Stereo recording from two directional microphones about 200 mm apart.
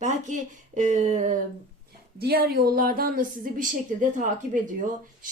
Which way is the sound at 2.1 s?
50° right (ahead or behind).